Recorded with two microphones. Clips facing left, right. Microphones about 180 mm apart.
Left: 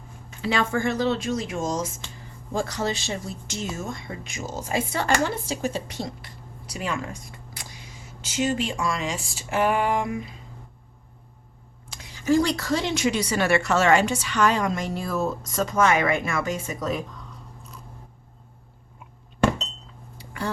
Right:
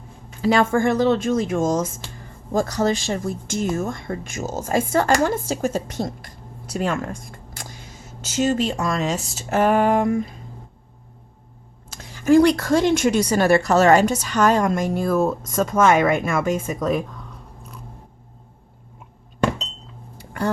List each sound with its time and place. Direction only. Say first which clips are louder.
0.4 s speech: right 6 dB; 45° right (ahead or behind)
11.9 s speech: right 7 dB; 50° right (ahead or behind)
20.1 s a sound: right 6 dB; 50° right (ahead or behind)